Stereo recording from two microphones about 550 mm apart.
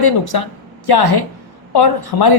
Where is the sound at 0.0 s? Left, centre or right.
Left.